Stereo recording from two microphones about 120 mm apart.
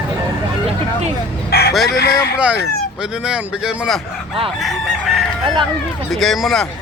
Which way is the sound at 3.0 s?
5° right (ahead or behind).